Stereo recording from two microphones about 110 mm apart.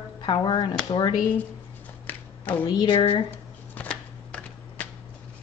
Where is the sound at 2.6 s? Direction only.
50° left (ahead or behind).